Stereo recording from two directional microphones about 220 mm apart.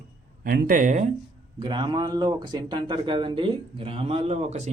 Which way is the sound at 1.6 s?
20° right (ahead or behind).